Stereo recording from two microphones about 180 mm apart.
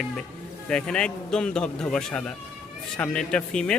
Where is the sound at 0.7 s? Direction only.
5° left (ahead or behind).